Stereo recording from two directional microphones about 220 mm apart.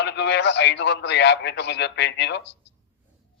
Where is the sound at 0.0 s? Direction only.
50° left (ahead or behind).